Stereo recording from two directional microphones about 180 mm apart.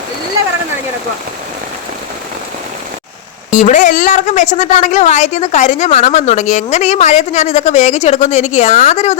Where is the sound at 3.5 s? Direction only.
45° left (ahead or behind).